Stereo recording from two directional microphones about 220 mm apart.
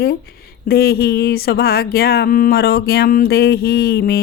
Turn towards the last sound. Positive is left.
turn(degrees=45)  # may be behind; listen again after turning